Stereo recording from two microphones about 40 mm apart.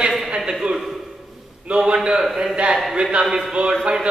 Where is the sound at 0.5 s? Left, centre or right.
Right.